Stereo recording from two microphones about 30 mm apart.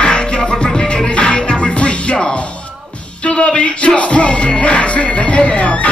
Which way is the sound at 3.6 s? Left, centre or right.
Left.